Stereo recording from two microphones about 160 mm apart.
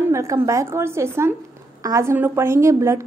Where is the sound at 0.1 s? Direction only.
20° right (ahead or behind).